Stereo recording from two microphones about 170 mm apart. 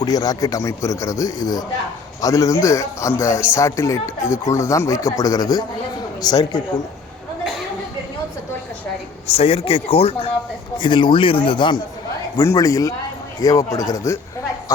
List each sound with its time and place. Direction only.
0.0 s speech: 20° left (ahead or behind)
9.2 s speech: 35° left (ahead or behind)
12.4 s speech: 20° left (ahead or behind)